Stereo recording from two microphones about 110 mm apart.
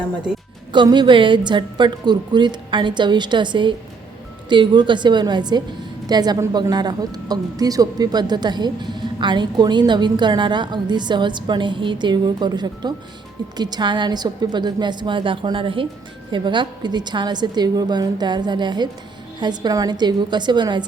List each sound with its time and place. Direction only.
0.7 s a woman's voice: 45° right (ahead or behind)